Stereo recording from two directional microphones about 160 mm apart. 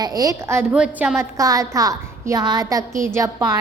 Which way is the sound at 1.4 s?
20° right (ahead or behind).